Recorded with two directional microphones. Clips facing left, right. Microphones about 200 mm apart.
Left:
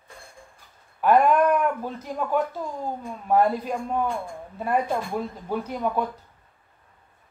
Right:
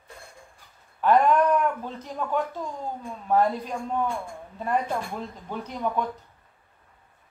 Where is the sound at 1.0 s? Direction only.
10° left (ahead or behind).